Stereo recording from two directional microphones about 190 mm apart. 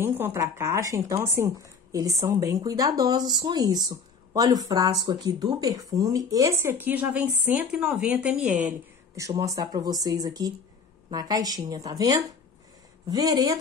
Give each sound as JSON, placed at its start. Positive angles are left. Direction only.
{"t": 0.0, "sound": "a woman's voice", "side_deg": -15}